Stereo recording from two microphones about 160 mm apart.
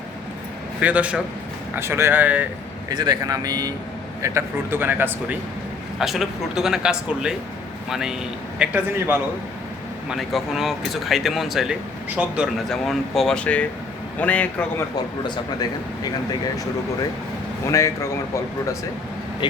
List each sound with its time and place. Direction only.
0.8 s a man's voice: 10° right (ahead or behind)
2.9 s a man's voice: 25° right (ahead or behind); by 14.4 s 10° left (ahead or behind)
17.7 s speech: 20° left (ahead or behind)